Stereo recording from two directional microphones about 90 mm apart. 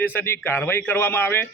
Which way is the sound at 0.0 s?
20° left (ahead or behind).